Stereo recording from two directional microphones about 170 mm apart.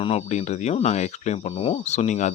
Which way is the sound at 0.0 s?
40° left (ahead or behind).